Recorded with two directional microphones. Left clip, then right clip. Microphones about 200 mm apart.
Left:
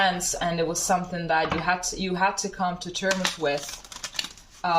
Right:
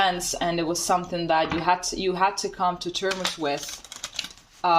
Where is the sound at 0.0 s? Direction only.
50° right (ahead or behind).